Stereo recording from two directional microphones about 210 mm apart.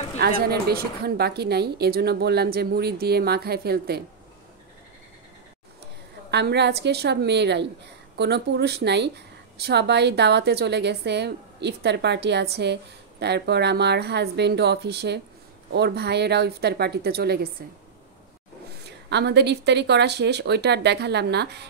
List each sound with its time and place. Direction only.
0.2 s a woman's voice: 50° right (ahead or behind)
6.3 s a woman's voice: 55° right (ahead or behind)
19.0 s a woman's voice: 55° right (ahead or behind)